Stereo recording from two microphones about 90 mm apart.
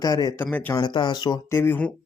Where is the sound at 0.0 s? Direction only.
50° left (ahead or behind).